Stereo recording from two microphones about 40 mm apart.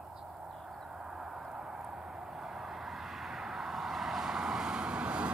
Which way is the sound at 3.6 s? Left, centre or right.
Centre.